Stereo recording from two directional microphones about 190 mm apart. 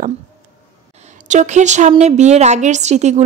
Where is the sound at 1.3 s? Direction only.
40° right (ahead or behind).